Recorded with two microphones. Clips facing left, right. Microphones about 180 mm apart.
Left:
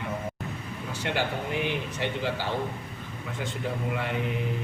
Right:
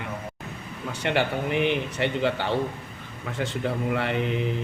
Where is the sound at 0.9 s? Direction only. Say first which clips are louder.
Right 4 dB; 65° right (ahead or behind).